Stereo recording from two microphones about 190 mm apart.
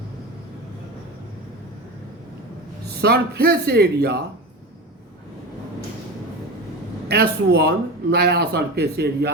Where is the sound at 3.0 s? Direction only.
55° right (ahead or behind).